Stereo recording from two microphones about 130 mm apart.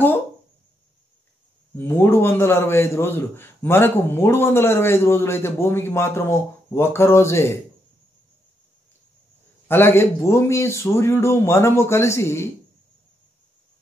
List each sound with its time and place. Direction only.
1.8 s a man's voice: 20° left (ahead or behind)
9.7 s a man's voice: 20° left (ahead or behind)